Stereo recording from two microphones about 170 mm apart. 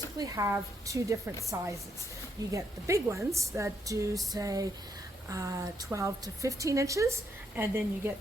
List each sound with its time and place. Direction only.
0.2 s a woman's voice: 20° right (ahead or behind)